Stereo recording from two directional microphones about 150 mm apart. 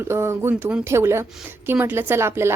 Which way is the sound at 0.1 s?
15° right (ahead or behind).